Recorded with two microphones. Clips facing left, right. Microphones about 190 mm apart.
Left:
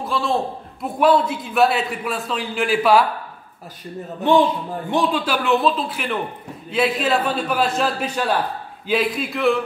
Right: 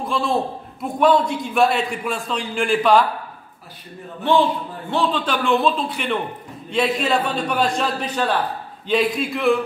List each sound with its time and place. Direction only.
0.0 s a man's voice: centre (ahead or behind)
4.2 s a man's voice: 15° left (ahead or behind); by 9.6 s centre (ahead or behind)